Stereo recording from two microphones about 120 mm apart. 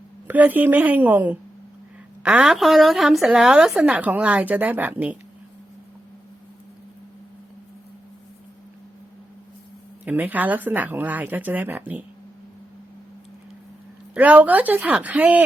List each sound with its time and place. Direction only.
0.3 s a woman's voice: 15° right (ahead or behind)
10.0 s a woman's voice: 15° right (ahead or behind)
14.1 s a woman's voice: 15° right (ahead or behind)